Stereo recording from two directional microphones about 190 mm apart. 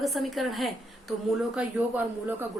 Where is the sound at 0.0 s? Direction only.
Centre (ahead or behind).